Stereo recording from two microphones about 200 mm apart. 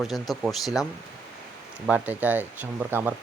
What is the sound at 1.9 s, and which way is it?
Speech, 5° right (ahead or behind).